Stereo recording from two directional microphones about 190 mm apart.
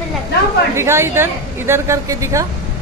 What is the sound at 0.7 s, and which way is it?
A woman's voice, 15° right (ahead or behind).